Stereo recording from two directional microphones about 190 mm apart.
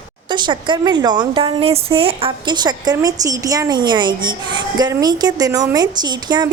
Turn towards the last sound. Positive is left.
turn(degrees=-20)  # may be behind; listen again after turning